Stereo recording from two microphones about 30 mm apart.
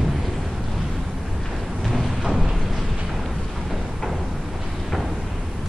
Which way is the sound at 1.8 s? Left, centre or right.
Centre.